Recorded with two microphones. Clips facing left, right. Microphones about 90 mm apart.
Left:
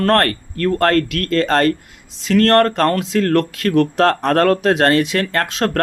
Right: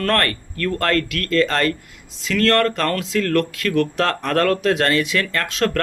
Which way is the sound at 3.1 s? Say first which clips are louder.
Left 3 dB; 40° left (ahead or behind).